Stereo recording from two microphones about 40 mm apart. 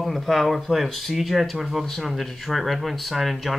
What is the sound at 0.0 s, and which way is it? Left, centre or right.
Speech, centre.